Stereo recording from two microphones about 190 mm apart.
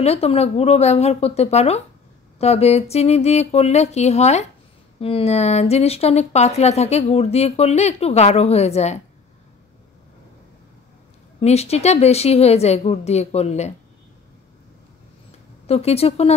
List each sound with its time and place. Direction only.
0.0 s speech: 35° left (ahead or behind)
11.4 s speech: 35° left (ahead or behind)
15.6 s speech: 30° left (ahead or behind)